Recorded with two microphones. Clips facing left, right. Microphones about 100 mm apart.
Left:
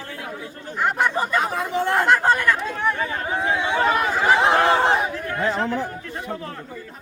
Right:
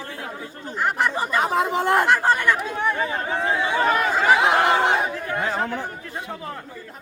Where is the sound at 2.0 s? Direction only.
5° right (ahead or behind).